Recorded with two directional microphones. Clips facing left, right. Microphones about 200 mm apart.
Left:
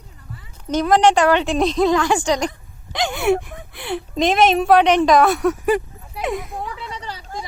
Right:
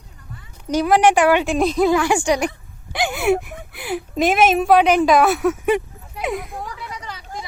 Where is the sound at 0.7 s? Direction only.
10° right (ahead or behind).